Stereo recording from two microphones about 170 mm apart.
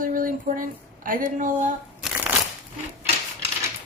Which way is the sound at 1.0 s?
55° right (ahead or behind).